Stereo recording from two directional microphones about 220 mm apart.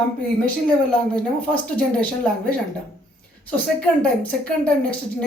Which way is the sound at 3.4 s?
5° left (ahead or behind).